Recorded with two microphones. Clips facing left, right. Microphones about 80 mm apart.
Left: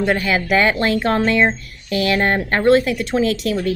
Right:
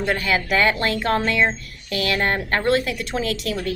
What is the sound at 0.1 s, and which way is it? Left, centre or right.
A woman's voice, left.